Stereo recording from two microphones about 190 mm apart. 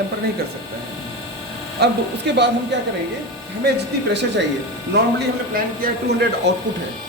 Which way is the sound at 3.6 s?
60° right (ahead or behind).